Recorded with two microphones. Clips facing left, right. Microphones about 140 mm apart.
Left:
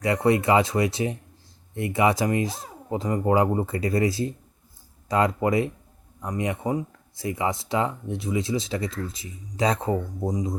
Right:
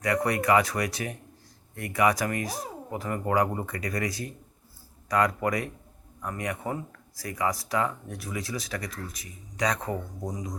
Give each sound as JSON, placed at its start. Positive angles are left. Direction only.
{"t": 0.0, "sound": "speech", "side_deg": 25}